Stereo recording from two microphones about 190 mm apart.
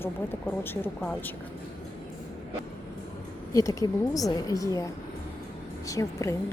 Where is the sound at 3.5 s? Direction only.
15° left (ahead or behind).